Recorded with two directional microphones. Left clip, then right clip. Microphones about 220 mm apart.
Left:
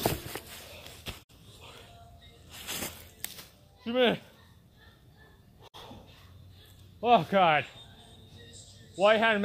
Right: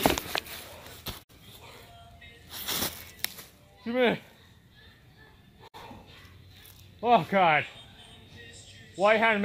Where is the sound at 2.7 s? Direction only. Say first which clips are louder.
Right 6 dB; 45° right (ahead or behind).